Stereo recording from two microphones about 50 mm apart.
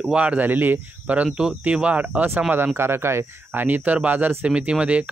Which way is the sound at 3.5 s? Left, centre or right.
Right.